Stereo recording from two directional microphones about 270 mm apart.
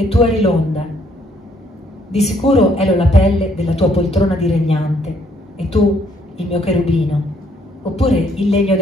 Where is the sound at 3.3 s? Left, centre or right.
Centre.